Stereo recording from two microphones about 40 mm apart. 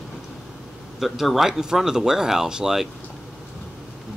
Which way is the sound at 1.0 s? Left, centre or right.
Centre.